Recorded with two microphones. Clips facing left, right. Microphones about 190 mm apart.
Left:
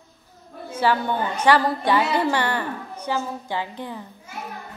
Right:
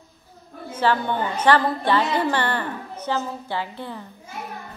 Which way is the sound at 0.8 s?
10° left (ahead or behind).